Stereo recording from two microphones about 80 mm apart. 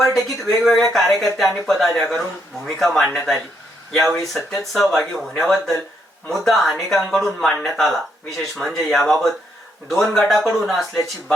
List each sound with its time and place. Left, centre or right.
0.0 s speech: centre